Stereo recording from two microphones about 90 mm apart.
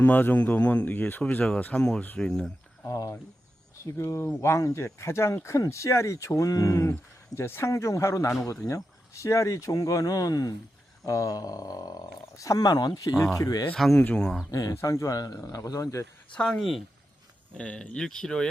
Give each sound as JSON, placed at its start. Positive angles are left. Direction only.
{"t": 0.0, "sound": "speech", "side_deg": 20}
{"t": 2.8, "sound": "speech", "side_deg": 40}
{"t": 14.0, "sound": "speech", "side_deg": 10}
{"t": 14.5, "sound": "speech", "side_deg": 40}
{"t": 16.4, "sound": "speech", "side_deg": 5}